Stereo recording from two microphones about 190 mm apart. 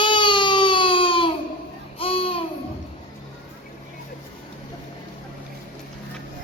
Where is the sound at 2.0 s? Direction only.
30° left (ahead or behind).